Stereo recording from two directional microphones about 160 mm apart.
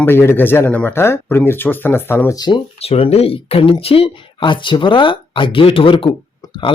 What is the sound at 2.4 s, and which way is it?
Speech, 35° left (ahead or behind).